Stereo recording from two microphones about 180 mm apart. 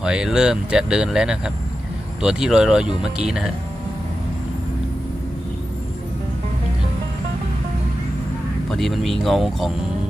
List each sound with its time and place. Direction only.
0.0 s speech: 5° right (ahead or behind)
8.6 s speech: centre (ahead or behind)